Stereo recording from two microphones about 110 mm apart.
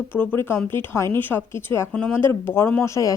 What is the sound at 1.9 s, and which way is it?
Speech, 10° left (ahead or behind).